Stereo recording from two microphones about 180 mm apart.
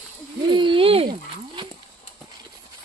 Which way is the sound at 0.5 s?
30° right (ahead or behind).